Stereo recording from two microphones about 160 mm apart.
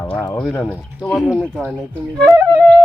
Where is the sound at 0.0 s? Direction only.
15° left (ahead or behind).